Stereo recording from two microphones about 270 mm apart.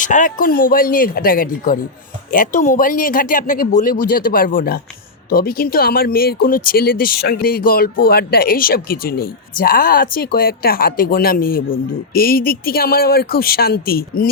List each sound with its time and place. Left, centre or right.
0.0 s a woman's voice: left